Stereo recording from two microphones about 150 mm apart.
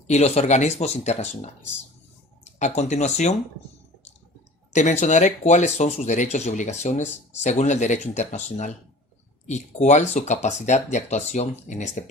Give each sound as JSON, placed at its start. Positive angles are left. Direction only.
{"t": 0.1, "sound": "speech", "side_deg": 45}
{"t": 4.7, "sound": "speech", "side_deg": 50}